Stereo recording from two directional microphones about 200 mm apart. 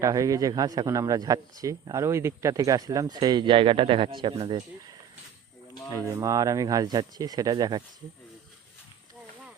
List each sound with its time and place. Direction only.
0.0 s a man's voice: 15° right (ahead or behind)
6.1 s speech: 15° right (ahead or behind)